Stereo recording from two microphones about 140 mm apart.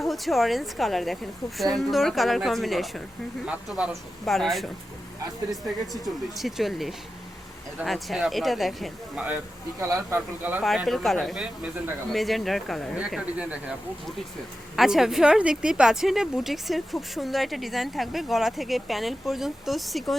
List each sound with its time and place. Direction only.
0.0 s speech: centre (ahead or behind)
5.6 s speech: centre (ahead or behind)
10.2 s speech: 10° right (ahead or behind)
10.6 s speech: centre (ahead or behind)
14.8 s speech: 5° right (ahead or behind)